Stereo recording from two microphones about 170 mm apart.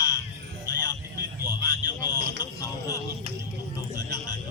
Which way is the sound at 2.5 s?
20° left (ahead or behind).